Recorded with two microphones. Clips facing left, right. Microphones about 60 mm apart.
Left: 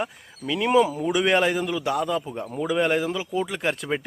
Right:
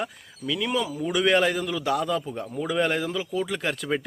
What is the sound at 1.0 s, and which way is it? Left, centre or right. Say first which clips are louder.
Speech: left 1 dB; centre.